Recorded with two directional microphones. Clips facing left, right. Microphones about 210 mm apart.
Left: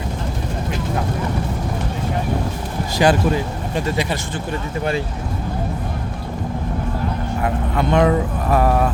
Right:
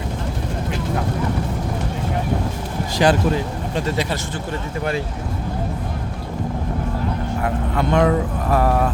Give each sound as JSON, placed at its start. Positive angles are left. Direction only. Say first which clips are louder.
{"t": 2.9, "sound": "speech", "louder": "left 1 dB", "side_deg": 10}
{"t": 4.8, "sound": "speech", "louder": "left 1 dB", "side_deg": 25}
{"t": 7.4, "sound": "speech", "louder": "left 2 dB", "side_deg": 20}